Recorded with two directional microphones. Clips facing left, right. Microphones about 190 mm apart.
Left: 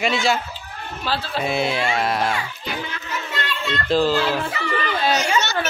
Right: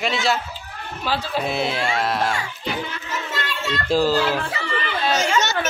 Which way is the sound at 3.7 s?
10° right (ahead or behind).